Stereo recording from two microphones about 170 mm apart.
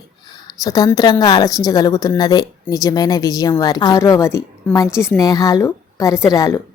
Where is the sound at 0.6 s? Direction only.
20° left (ahead or behind).